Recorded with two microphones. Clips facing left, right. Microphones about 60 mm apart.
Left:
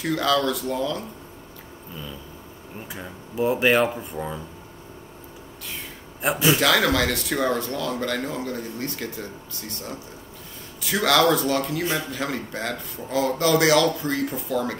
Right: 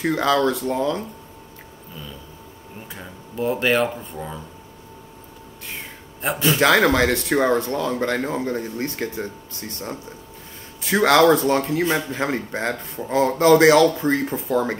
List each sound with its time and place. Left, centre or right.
0.0 s speech: right
2.9 s speech: centre
6.2 s a man's voice: centre
6.6 s speech: right